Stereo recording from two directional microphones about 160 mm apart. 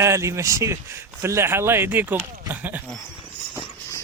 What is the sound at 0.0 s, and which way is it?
Speech, 20° right (ahead or behind).